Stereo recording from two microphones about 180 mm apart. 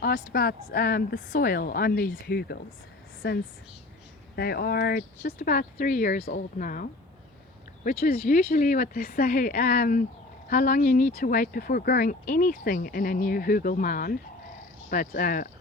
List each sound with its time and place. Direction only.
0.0 s a woman's voice: 55° left (ahead or behind)
4.4 s a woman's voice: 60° left (ahead or behind)
7.9 s speech: 45° left (ahead or behind)